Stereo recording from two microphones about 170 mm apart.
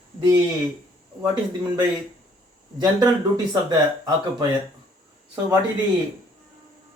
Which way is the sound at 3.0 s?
20° right (ahead or behind).